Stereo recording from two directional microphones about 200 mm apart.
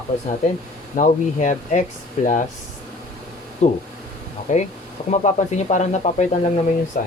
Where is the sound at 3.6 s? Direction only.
35° left (ahead or behind).